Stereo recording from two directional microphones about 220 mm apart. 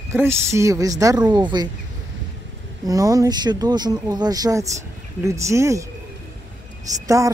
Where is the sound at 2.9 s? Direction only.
15° right (ahead or behind).